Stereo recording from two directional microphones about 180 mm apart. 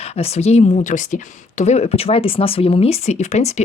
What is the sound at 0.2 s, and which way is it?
Speech, 35° left (ahead or behind).